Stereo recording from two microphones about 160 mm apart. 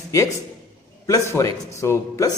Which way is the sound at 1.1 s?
20° left (ahead or behind).